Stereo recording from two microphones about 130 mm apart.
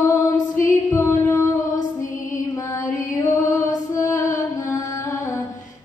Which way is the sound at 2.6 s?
25° left (ahead or behind).